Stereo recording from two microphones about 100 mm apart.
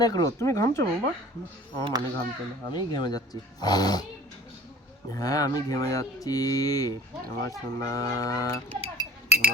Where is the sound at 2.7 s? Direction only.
45° left (ahead or behind).